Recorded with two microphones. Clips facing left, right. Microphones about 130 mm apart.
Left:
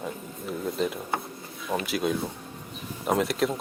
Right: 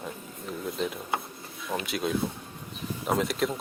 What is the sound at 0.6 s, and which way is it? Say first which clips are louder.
Speech: left 3 dB; centre (ahead or behind).